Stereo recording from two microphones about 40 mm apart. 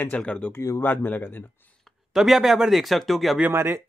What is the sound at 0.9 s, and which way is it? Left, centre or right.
Speech, left.